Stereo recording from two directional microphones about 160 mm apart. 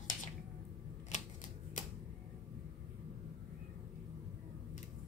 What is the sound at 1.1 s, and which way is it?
Typewriter, 50° left (ahead or behind).